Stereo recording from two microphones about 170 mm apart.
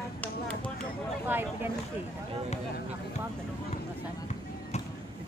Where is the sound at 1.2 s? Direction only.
10° right (ahead or behind).